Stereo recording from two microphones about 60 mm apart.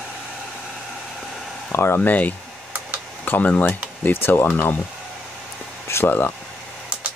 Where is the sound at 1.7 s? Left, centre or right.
Left.